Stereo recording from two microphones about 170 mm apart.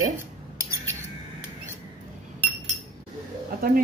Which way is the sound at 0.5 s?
15° right (ahead or behind).